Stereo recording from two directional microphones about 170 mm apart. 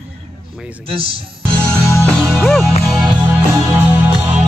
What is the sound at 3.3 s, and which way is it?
Music, 10° right (ahead or behind).